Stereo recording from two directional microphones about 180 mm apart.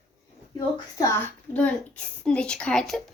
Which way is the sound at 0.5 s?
15° left (ahead or behind).